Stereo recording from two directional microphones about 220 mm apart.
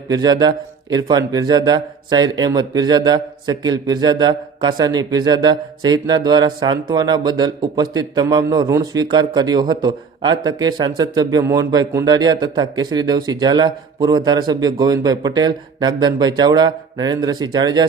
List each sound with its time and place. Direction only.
0.1 s a man's voice: 20° right (ahead or behind)